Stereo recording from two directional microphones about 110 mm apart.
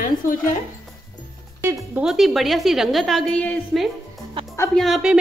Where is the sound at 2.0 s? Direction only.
5° right (ahead or behind).